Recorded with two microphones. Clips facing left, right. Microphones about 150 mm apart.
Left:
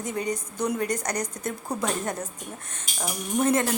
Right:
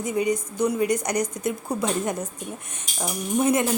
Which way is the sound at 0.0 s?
10° right (ahead or behind).